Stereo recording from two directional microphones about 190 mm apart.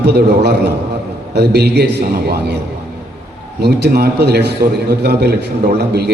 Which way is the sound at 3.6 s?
60° right (ahead or behind).